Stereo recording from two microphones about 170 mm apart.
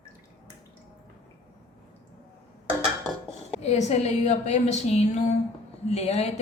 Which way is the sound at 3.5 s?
40° left (ahead or behind).